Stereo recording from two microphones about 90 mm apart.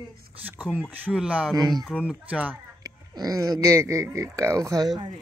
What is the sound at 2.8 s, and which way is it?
Speech, 45° right (ahead or behind).